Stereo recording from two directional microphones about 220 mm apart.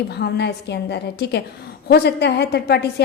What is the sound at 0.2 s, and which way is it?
A woman's voice, 50° left (ahead or behind).